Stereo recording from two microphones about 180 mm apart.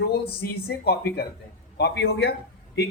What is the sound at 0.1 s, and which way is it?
A man's voice, 60° left (ahead or behind).